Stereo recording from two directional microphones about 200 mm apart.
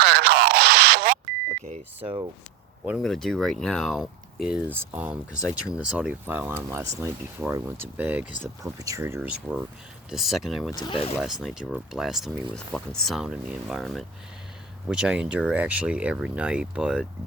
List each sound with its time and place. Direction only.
0.0 s a sound: 55° right (ahead or behind)
1.6 s speech: 30° right (ahead or behind)
2.8 s speech: centre (ahead or behind)
10.7 s speech: 20° left (ahead or behind)
11.4 s speech: centre (ahead or behind)